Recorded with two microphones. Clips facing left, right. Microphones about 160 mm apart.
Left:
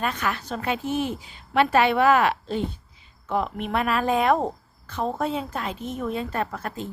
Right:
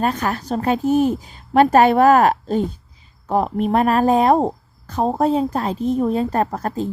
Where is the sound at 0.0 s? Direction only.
40° right (ahead or behind).